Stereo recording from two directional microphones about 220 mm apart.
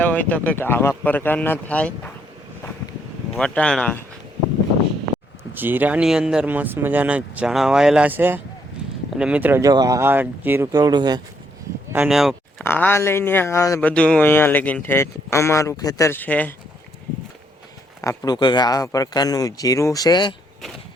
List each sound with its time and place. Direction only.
0.0 s speech: 5° left (ahead or behind)
3.3 s speech: 5° left (ahead or behind)
5.5 s speech: 10° right (ahead or behind)
11.9 s a sound: centre (ahead or behind)
12.6 s speech: 10° left (ahead or behind)
18.0 s speech: 15° left (ahead or behind)